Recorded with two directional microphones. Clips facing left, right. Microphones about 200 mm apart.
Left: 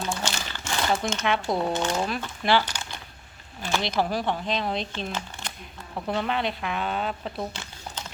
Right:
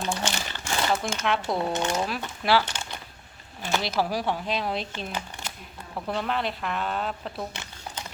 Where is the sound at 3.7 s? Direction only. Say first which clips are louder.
Left 1 dB; 5° right (ahead or behind).